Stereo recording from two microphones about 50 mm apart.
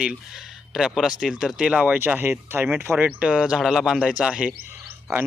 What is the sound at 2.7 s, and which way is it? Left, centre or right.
Mantra, right.